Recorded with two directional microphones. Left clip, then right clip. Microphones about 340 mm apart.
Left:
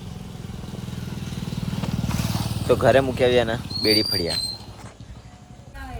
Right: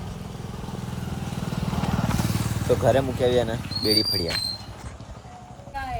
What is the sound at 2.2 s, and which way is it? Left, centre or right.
Vehicle, centre.